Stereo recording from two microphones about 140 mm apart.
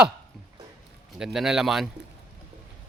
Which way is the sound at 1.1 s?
5° right (ahead or behind).